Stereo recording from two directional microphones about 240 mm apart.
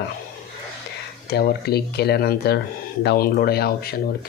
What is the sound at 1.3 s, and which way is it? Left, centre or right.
Speech, left.